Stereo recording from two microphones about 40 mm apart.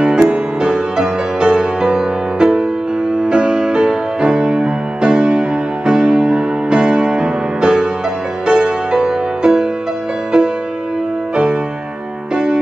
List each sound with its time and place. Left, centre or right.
0.0 s music: right